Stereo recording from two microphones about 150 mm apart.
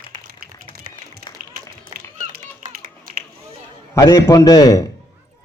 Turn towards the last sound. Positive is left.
turn(degrees=25)  # may be behind; listen again after turning